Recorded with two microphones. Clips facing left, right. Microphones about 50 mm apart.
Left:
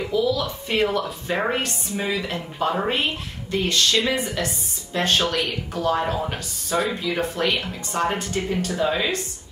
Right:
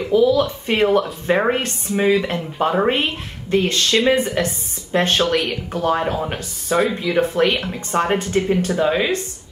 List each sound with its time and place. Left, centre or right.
0.1 s a woman's voice: right